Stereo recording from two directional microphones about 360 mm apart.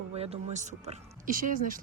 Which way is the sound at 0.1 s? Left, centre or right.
Centre.